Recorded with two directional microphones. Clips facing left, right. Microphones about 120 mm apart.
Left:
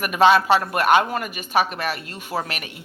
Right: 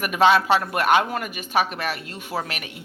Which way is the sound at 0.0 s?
45° left (ahead or behind).